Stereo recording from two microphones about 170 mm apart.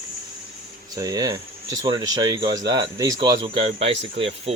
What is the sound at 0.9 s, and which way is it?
Speech, 20° right (ahead or behind).